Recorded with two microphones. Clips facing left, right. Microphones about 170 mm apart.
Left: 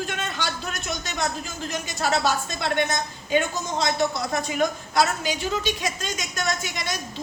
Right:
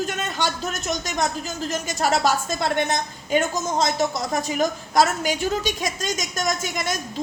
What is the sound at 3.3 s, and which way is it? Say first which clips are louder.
A woman's voice: right 2 dB; 45° right (ahead or behind).